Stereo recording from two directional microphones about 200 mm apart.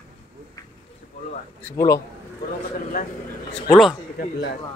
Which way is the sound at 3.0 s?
45° left (ahead or behind).